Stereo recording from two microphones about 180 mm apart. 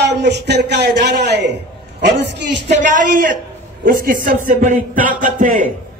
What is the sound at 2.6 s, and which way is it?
Music, 45° right (ahead or behind).